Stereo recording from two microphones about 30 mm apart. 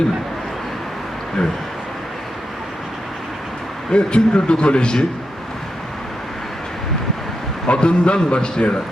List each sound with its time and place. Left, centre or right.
3.9 s a man's voice: left
7.7 s a man's voice: left